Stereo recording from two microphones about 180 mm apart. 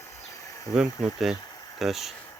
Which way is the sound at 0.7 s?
Centre (ahead or behind).